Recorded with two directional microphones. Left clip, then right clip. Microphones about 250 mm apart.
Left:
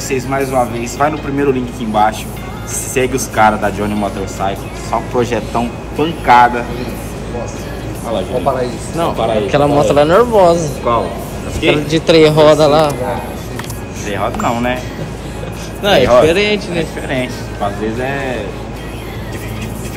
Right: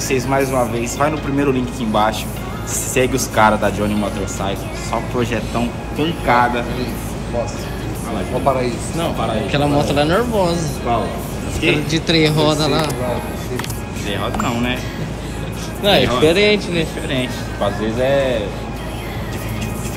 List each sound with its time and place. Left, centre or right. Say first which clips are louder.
0.1 s speech: left 2 dB; centre
8.9 s speech: left 8 dB; centre
12.4 s a man's voice: left 9 dB; right
14.0 s speech: left 5 dB; centre
15.8 s speech: left 5 dB; centre